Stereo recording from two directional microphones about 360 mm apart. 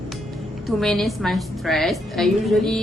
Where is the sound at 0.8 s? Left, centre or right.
Centre.